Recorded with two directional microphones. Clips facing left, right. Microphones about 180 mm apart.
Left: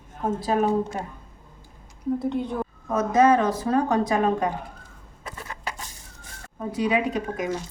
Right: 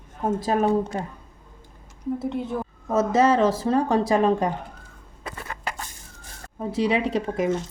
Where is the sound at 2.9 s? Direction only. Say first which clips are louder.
Even; 25° right (ahead or behind).